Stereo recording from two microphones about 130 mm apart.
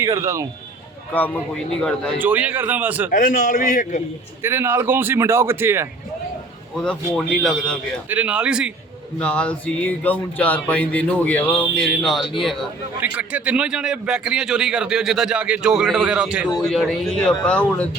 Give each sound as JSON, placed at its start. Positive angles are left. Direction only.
{"t": 0.0, "sound": "a man's voice", "side_deg": -25}
{"t": 1.1, "sound": "speech", "side_deg": 15}
{"t": 2.1, "sound": "speech", "side_deg": -15}
{"t": 3.1, "sound": "a man's voice", "side_deg": 90}
{"t": 4.4, "sound": "a man's voice", "side_deg": -20}
{"t": 6.7, "sound": "a man's voice", "side_deg": 5}
{"t": 8.1, "sound": "speech", "side_deg": -10}
{"t": 9.1, "sound": "a man's voice", "side_deg": 10}
{"t": 13.0, "sound": "a man's voice", "side_deg": -10}
{"t": 16.6, "sound": "a man's voice", "side_deg": 0}